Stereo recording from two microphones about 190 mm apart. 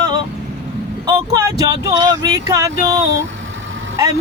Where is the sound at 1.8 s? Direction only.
20° right (ahead or behind).